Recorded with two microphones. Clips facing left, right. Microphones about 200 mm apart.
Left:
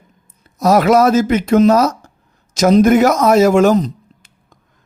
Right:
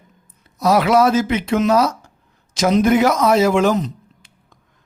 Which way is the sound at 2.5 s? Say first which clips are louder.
Left 5 dB; 45° left (ahead or behind).